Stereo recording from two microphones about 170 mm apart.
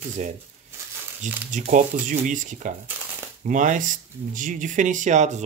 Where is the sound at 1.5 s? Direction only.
50° right (ahead or behind).